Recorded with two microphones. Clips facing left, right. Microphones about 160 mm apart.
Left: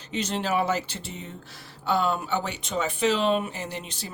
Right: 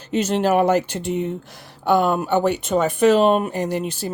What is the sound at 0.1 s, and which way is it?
Speech, 50° right (ahead or behind).